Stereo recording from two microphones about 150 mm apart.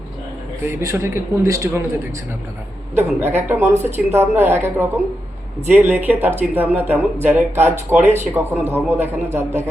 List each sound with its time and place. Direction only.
0.6 s a man's voice: 20° right (ahead or behind)
3.2 s speech: 15° right (ahead or behind)